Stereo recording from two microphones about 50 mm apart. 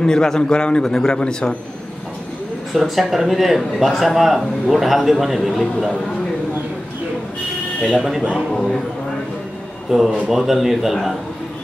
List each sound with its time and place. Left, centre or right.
0.0 s a man's voice: centre
2.7 s speech: centre
7.9 s speech: centre
9.8 s speech: centre